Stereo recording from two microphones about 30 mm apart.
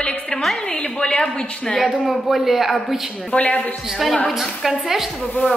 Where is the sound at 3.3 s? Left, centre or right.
Left.